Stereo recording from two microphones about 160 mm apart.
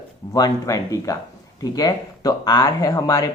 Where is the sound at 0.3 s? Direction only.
20° left (ahead or behind).